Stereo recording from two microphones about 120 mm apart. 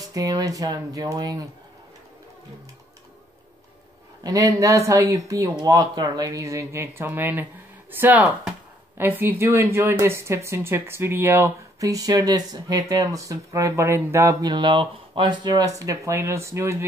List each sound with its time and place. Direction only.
0.0 s speech: 30° right (ahead or behind)
4.2 s speech: 30° right (ahead or behind)
14.4 s speech: 40° right (ahead or behind)